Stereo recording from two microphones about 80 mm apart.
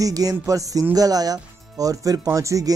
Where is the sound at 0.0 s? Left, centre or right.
Right.